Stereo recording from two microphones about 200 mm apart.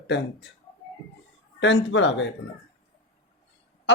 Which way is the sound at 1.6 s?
65° left (ahead or behind).